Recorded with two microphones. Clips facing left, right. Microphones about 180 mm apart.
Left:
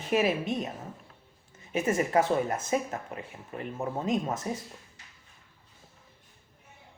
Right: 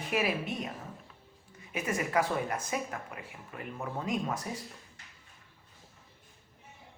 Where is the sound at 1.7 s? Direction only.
25° left (ahead or behind).